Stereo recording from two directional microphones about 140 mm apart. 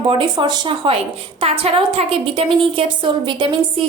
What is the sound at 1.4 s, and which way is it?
A woman's voice, 45° right (ahead or behind).